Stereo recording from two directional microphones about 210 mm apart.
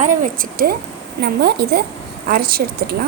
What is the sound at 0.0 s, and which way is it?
A woman's voice, 40° right (ahead or behind).